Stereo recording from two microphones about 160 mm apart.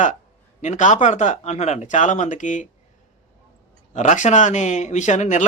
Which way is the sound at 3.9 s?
50° left (ahead or behind).